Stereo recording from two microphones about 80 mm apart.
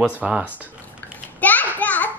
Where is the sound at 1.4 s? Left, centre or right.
Left.